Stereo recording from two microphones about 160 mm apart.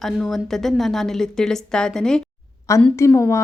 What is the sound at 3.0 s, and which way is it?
Speech, 15° left (ahead or behind).